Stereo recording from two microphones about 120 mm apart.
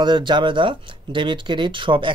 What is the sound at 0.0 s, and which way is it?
Speech, 40° right (ahead or behind).